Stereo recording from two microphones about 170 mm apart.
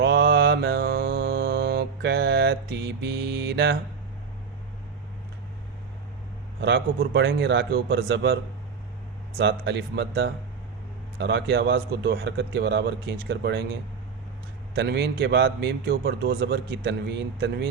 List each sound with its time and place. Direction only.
0.0 s mantra: 75° right (ahead or behind)
6.6 s speech: 75° right (ahead or behind)
9.4 s speech: 90° right
14.8 s a man's voice: 80° right